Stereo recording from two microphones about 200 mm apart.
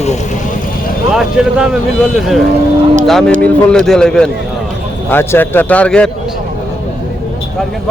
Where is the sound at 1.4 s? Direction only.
5° right (ahead or behind).